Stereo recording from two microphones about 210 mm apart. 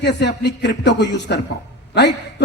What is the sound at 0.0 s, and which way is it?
A woman's voice, 50° left (ahead or behind).